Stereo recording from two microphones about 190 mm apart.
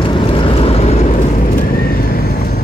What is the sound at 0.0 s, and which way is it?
Vehicle, 25° left (ahead or behind).